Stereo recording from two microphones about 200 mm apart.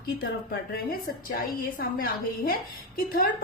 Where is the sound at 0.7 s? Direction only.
50° left (ahead or behind).